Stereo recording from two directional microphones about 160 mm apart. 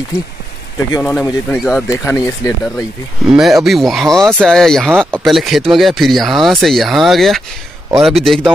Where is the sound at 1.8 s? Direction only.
15° left (ahead or behind).